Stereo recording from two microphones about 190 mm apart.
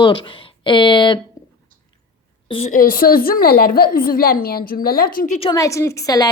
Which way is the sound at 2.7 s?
50° left (ahead or behind).